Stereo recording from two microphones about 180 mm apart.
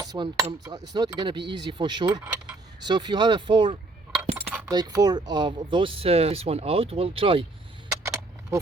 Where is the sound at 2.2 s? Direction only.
5° right (ahead or behind).